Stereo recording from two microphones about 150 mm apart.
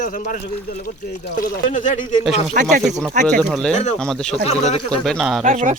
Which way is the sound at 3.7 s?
50° left (ahead or behind).